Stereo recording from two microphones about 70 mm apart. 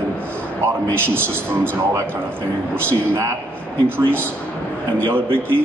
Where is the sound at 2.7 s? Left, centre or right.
Right.